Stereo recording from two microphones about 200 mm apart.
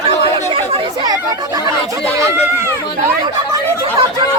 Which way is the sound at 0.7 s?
20° right (ahead or behind).